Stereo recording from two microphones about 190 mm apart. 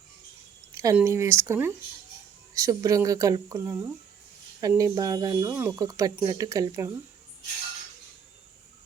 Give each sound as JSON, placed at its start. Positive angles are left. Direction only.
{"t": 0.7, "sound": "speech", "side_deg": -15}